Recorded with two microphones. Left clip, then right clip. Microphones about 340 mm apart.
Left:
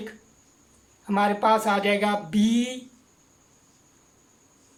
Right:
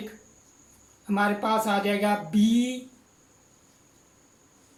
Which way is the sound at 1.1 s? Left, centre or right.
Left.